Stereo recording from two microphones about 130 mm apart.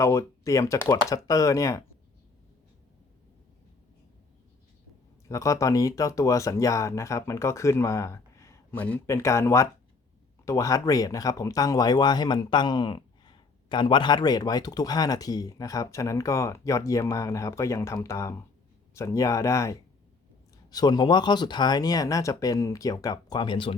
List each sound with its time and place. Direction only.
0.0 s speech: 20° left (ahead or behind)
5.3 s speech: 25° left (ahead or behind)
8.7 s speech: 10° left (ahead or behind)
9.0 s speech: 25° left (ahead or behind); by 23.7 s 40° left (ahead or behind)